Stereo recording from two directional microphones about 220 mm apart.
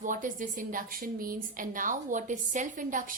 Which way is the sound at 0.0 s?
35° right (ahead or behind).